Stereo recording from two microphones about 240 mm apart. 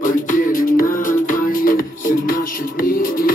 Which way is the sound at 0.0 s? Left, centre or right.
Left.